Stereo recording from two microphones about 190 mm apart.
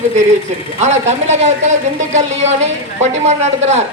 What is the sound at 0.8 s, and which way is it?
Speech, 35° right (ahead or behind).